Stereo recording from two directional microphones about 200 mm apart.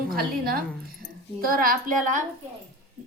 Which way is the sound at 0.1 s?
50° right (ahead or behind).